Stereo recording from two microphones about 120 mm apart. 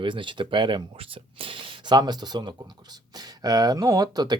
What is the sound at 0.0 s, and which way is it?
Speech, 45° right (ahead or behind).